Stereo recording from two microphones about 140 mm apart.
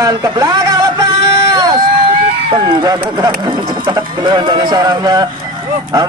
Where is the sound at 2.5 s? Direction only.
35° right (ahead or behind).